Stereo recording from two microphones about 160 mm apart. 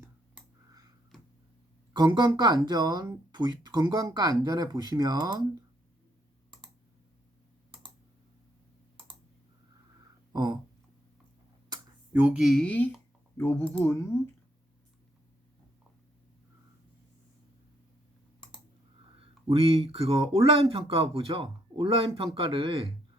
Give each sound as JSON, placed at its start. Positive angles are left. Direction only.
{"t": 1.9, "sound": "speech", "side_deg": -25}
{"t": 10.3, "sound": "speech", "side_deg": -25}
{"t": 12.1, "sound": "speech", "side_deg": -10}
{"t": 19.2, "sound": "speech", "side_deg": -35}